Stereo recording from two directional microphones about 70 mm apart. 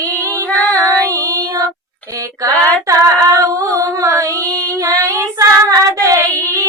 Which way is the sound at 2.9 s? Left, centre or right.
Right.